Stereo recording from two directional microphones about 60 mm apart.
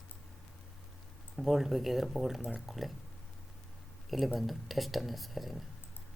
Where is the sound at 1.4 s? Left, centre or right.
Centre.